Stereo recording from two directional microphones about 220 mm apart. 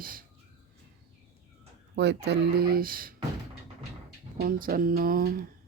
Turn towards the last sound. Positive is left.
turn(degrees=-40)  # may be behind; listen again after turning